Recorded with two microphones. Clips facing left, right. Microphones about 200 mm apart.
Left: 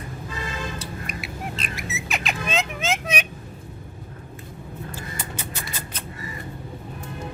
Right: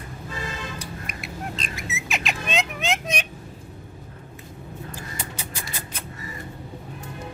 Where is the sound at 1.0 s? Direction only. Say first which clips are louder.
Left 1 dB; 5° left (ahead or behind).